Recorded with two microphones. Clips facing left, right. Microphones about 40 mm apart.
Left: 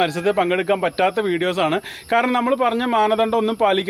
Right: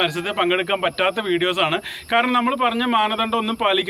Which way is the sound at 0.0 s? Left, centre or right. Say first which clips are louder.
Left 2 dB; right.